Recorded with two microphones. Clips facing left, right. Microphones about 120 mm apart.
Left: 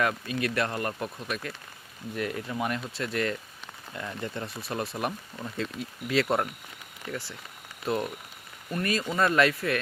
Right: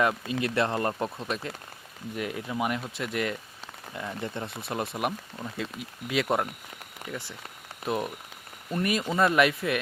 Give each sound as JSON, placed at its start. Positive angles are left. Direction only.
{"t": 0.0, "sound": "speech", "side_deg": -20}
{"t": 7.9, "sound": "speech", "side_deg": -15}